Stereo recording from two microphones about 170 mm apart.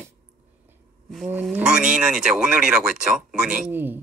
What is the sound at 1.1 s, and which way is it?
A man's voice, centre (ahead or behind).